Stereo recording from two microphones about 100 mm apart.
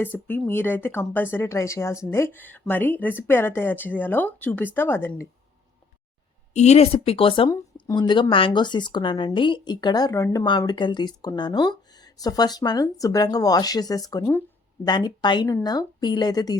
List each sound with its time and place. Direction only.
0.0 s speech: 15° left (ahead or behind)
6.5 s speech: 90° left; by 7.5 s 65° left (ahead or behind)
7.9 s speech: 55° left (ahead or behind); by 10.4 s 35° left (ahead or behind)
10.7 s speech: 50° left (ahead or behind)